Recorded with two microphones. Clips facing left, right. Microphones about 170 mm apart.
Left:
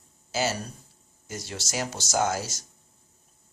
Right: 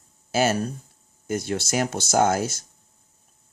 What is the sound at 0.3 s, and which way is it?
Speech, 55° right (ahead or behind).